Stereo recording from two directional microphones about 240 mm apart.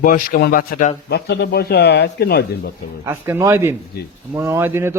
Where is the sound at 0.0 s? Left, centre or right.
Left.